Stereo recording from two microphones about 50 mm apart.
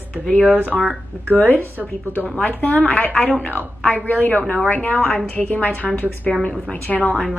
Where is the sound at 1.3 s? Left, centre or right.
Left.